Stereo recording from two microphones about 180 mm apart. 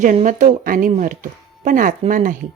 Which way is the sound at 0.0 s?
45° right (ahead or behind).